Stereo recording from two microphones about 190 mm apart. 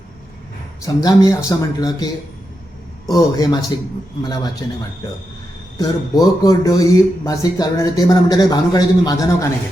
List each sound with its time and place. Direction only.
0.8 s a man's voice: 20° left (ahead or behind)
3.1 s a man's voice: 20° left (ahead or behind)
5.7 s a man's voice: 20° left (ahead or behind)